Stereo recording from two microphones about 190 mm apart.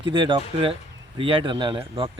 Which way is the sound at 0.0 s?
25° right (ahead or behind).